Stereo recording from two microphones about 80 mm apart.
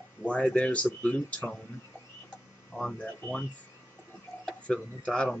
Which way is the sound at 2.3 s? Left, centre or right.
Centre.